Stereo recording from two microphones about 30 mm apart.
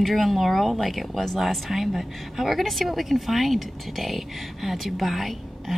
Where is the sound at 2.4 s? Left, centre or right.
Centre.